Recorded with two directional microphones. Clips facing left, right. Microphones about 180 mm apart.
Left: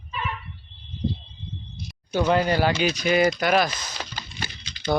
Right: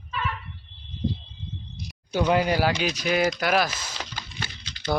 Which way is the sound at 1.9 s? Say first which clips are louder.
Left 1 dB; 10° right (ahead or behind).